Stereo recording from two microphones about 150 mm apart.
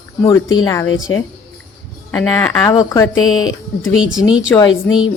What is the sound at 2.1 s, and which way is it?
Speech, 10° left (ahead or behind).